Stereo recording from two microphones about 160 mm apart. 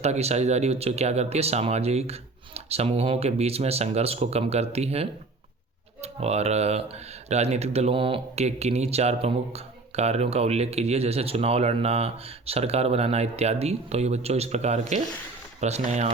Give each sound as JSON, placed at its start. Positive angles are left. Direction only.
{"t": 0.0, "sound": "speech", "side_deg": -40}